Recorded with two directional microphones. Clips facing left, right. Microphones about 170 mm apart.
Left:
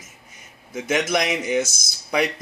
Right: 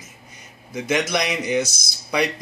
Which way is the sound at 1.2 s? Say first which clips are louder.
Even; 50° left (ahead or behind).